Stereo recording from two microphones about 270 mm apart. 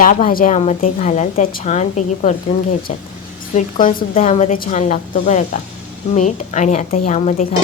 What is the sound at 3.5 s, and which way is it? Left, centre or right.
A woman's voice, left.